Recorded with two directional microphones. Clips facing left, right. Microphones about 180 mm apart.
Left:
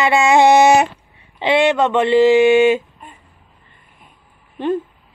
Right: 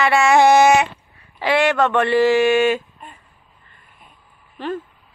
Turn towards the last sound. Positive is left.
turn(degrees=20)  # may be behind; listen again after turning